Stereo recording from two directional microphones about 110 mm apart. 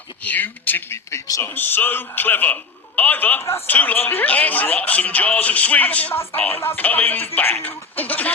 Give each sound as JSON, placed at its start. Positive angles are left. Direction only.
{"t": 0.2, "sound": "speech", "side_deg": 15}